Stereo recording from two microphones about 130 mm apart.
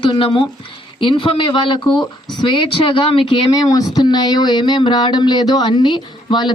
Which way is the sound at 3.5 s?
30° left (ahead or behind).